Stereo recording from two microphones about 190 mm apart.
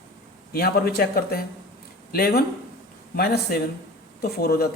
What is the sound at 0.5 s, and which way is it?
A woman's voice, 55° left (ahead or behind).